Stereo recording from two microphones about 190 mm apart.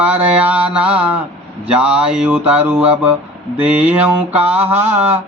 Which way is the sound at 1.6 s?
5° right (ahead or behind).